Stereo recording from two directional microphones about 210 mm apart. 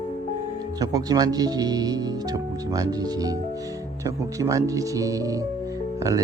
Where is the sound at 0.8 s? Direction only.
15° right (ahead or behind).